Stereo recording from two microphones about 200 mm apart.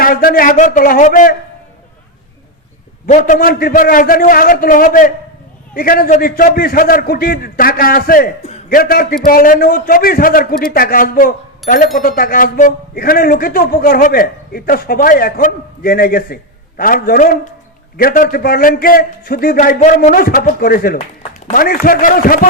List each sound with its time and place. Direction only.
0.0 s a man's voice: 45° left (ahead or behind)
3.1 s a man's voice: 40° left (ahead or behind)